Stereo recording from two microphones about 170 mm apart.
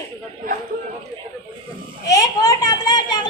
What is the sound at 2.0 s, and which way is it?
A child's voice, 20° left (ahead or behind).